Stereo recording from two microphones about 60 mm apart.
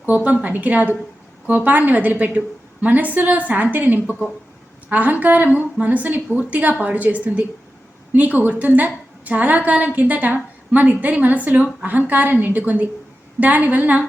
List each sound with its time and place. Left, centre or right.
0.4 s a woman's voice: right